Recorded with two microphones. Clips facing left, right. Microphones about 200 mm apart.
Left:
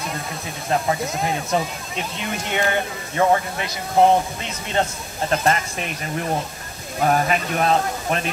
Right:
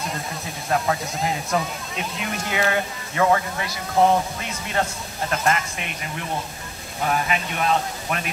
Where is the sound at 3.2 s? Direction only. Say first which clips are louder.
Left 1 dB; 20° left (ahead or behind).